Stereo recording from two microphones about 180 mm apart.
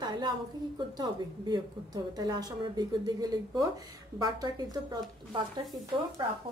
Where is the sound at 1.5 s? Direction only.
20° right (ahead or behind).